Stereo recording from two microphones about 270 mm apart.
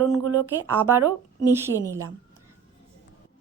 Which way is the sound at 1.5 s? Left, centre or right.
Centre.